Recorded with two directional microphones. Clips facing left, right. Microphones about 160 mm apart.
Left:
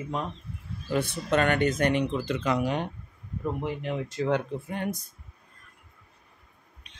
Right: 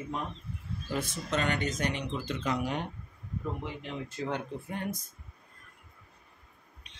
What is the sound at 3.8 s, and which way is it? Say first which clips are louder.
Speech: left 7 dB; 85° left.